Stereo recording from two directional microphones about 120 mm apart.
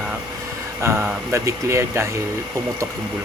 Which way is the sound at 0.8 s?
20° right (ahead or behind).